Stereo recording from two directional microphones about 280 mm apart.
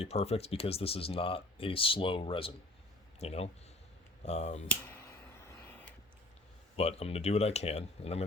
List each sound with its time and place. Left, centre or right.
0.0 s speech: left
6.7 s speech: left